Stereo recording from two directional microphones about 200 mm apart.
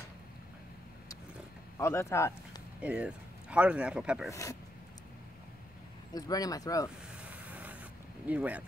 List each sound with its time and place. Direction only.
1.8 s speech: 15° left (ahead or behind)
2.8 s speech: 5° right (ahead or behind)
4.3 s speech: 15° left (ahead or behind)
6.1 s speech: 20° left (ahead or behind)
7.2 s a sound: 5° right (ahead or behind)
8.3 s speech: 5° right (ahead or behind)